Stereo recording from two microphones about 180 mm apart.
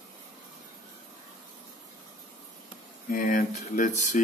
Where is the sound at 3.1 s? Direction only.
45° left (ahead or behind).